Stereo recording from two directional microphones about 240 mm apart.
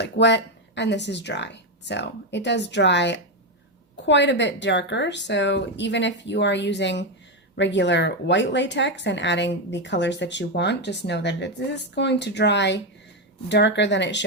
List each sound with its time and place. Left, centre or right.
0.0 s speech: left